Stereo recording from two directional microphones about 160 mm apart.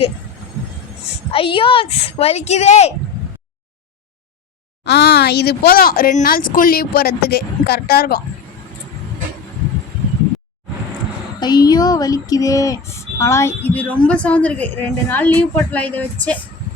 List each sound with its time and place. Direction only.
1.3 s speech: 35° left (ahead or behind)
4.9 s speech: 90° left; by 8.2 s 70° left (ahead or behind)
11.3 s a sound: 25° left (ahead or behind); by 16.0 s 10° left (ahead or behind)